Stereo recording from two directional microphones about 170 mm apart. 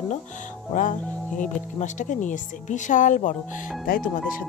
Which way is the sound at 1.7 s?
45° left (ahead or behind).